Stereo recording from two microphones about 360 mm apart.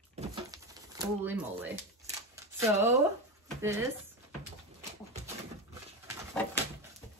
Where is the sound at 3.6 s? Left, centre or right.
Centre.